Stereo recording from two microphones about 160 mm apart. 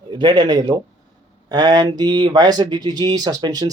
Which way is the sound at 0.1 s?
30° right (ahead or behind).